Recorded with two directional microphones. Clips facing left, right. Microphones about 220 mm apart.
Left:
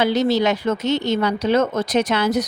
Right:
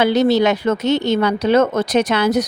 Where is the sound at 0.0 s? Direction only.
65° right (ahead or behind).